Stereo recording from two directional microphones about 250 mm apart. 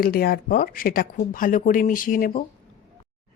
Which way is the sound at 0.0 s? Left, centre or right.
Left.